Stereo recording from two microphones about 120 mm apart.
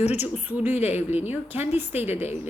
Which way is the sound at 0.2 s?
15° right (ahead or behind).